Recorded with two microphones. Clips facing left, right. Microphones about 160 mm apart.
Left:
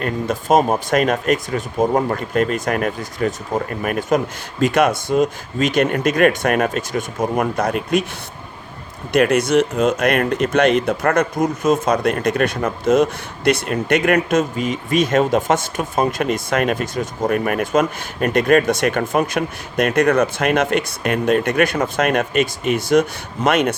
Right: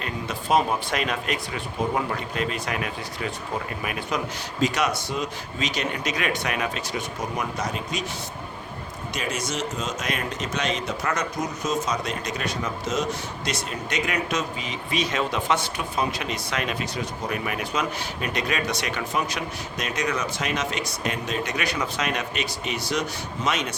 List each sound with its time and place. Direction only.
0.0 s speech: 45° left (ahead or behind)
9.1 s speech: 60° left (ahead or behind)